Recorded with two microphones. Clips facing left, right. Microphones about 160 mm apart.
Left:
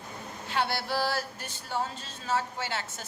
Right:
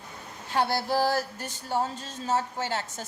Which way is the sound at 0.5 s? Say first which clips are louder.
Right 4 dB; 45° right (ahead or behind).